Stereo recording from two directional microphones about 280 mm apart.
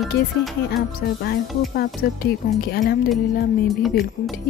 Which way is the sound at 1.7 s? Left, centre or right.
Left.